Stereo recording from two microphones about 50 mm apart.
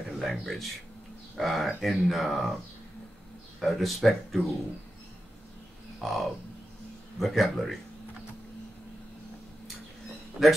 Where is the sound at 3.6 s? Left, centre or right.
Centre.